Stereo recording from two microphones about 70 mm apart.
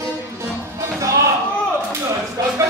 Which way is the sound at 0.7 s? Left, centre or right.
Right.